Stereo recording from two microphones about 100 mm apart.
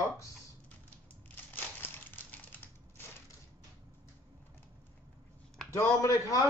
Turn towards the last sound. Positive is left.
turn(degrees=35)  # may be behind; listen again after turning